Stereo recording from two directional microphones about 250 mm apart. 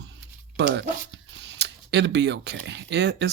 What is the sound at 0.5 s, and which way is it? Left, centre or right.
Speech, right.